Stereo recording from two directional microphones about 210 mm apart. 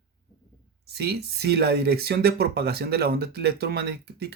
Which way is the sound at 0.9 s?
50° right (ahead or behind).